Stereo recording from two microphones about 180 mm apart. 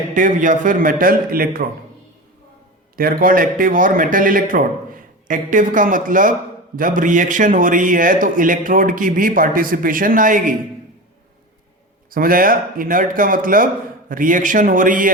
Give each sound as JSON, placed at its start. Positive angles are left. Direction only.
{"t": 0.1, "sound": "a man's voice", "side_deg": -45}
{"t": 2.9, "sound": "a man's voice", "side_deg": -55}
{"t": 12.1, "sound": "a man's voice", "side_deg": -50}